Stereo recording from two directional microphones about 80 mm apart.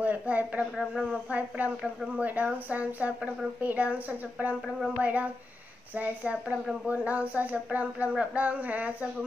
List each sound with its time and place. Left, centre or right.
0.0 s a woman's voice: centre